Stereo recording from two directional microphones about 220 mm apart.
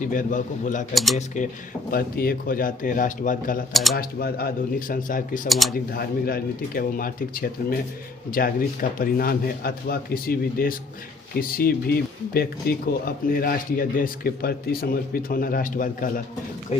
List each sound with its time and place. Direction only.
0.0 s speech: 35° left (ahead or behind)
0.9 s speech: centre (ahead or behind)
1.9 s speech: 40° left (ahead or behind)
3.7 s speech: centre (ahead or behind)
3.9 s speech: 45° left (ahead or behind)
5.5 s speech: centre (ahead or behind)
5.9 s speech: 45° left (ahead or behind)